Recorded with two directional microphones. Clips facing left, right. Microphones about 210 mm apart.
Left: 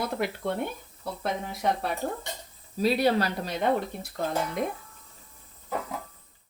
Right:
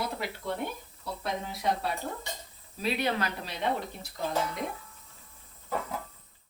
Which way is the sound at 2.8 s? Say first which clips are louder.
Left 6 dB; 35° left (ahead or behind).